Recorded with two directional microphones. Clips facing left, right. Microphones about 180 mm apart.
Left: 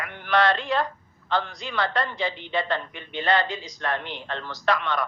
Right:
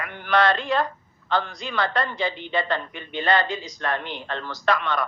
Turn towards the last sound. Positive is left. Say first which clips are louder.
# right 1 dB
turn(degrees=-45)  # may be behind; listen again after turning